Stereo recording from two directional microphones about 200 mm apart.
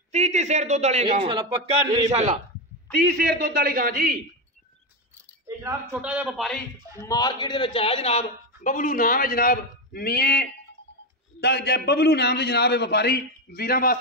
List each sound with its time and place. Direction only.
0.1 s a man's voice: 35° right (ahead or behind)
3.0 s a man's voice: 50° right (ahead or behind)
5.6 s a man's voice: 10° right (ahead or behind)
7.0 s a man's voice: 20° left (ahead or behind); by 13.9 s 50° left (ahead or behind)